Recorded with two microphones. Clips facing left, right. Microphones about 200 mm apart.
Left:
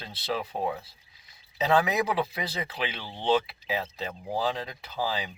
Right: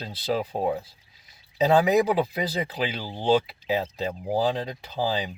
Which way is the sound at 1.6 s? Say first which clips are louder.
Right 5 dB; 35° right (ahead or behind).